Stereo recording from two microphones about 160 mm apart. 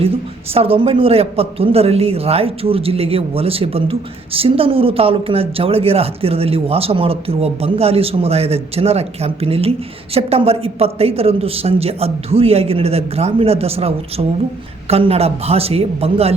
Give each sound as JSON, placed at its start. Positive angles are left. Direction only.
{"t": 0.5, "sound": "a man's voice", "side_deg": -35}